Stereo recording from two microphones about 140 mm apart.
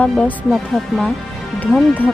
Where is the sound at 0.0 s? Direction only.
10° left (ahead or behind).